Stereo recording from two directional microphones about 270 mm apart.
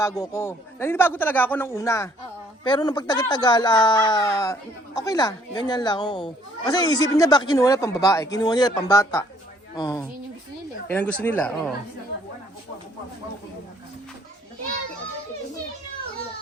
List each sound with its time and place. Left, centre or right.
0.0 s speech: centre